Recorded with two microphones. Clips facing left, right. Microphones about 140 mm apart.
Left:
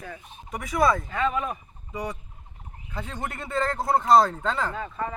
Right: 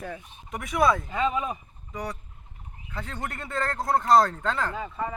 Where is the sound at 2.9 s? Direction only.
5° left (ahead or behind).